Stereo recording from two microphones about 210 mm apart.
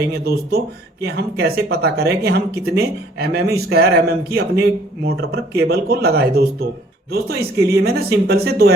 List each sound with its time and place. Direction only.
0.1 s speech: 50° right (ahead or behind)